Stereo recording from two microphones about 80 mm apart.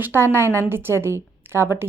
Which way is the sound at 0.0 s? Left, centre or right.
Right.